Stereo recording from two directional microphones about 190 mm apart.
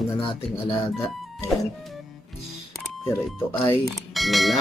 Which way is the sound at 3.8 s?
Centre (ahead or behind).